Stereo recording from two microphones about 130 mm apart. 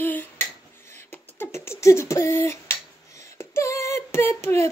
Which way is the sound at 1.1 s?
20° left (ahead or behind).